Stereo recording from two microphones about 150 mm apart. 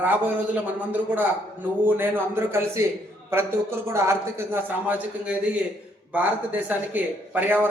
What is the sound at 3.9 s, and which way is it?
A man's voice, 15° right (ahead or behind).